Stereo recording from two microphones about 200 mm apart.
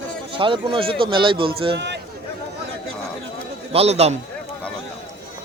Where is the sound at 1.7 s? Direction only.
60° right (ahead or behind).